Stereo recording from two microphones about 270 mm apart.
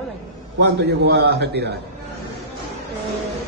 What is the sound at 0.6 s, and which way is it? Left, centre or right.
A man's voice, right.